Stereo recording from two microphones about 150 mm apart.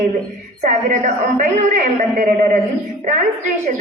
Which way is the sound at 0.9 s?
50° right (ahead or behind).